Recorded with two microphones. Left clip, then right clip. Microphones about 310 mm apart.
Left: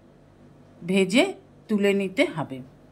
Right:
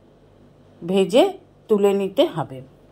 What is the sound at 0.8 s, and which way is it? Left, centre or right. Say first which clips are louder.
A woman's voice: right 5 dB; centre.